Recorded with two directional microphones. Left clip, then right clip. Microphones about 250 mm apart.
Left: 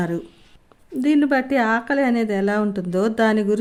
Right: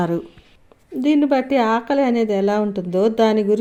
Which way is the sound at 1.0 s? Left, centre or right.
Centre.